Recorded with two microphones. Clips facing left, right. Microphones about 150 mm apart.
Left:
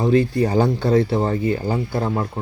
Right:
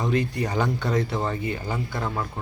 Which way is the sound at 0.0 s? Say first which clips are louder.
Left 8 dB; 30° left (ahead or behind).